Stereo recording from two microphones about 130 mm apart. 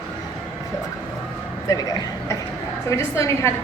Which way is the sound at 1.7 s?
25° left (ahead or behind).